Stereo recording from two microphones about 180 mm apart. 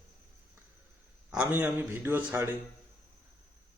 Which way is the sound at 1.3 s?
5° right (ahead or behind).